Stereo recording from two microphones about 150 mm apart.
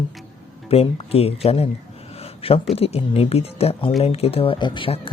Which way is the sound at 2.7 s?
40° left (ahead or behind).